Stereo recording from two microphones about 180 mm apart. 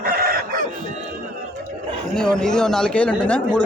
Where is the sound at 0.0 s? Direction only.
55° right (ahead or behind).